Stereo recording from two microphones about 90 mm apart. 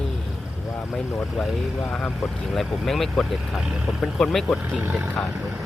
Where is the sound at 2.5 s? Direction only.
Centre (ahead or behind).